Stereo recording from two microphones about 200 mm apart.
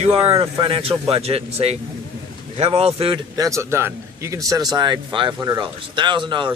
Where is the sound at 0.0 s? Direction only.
30° right (ahead or behind).